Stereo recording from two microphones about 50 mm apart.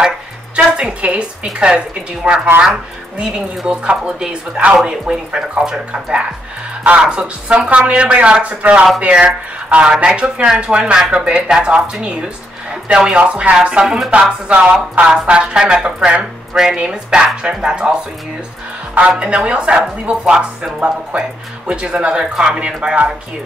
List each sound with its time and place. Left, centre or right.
0.6 s speech: centre
4.8 s speech: centre
6.8 s speech: right
18.9 s speech: right